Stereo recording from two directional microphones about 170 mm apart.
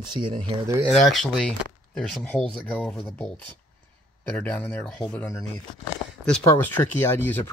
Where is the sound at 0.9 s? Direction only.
Centre (ahead or behind).